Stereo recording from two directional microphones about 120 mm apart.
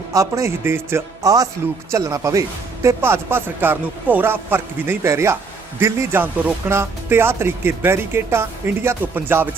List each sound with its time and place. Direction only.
0.1 s speech: 25° right (ahead or behind)